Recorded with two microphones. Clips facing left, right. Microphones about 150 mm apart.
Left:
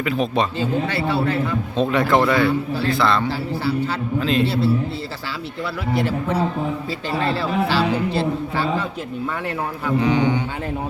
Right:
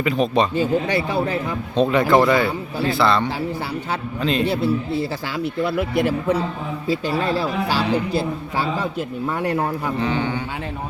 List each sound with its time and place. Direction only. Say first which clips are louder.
0.0 s speech: right 2 dB; centre (ahead or behind)
0.5 s speech: right 3 dB; 15° right (ahead or behind)
1.7 s speech: right 3 dB; centre (ahead or behind)
6.8 s speech: right 2 dB; 10° right (ahead or behind)
10.0 s speech: left 5 dB; 15° left (ahead or behind)